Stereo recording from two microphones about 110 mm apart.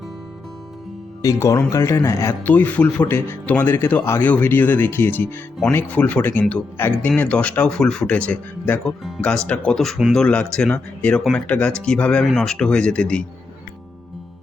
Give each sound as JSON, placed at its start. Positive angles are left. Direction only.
{"t": 1.2, "sound": "speech", "side_deg": 30}
{"t": 2.4, "sound": "speech", "side_deg": 15}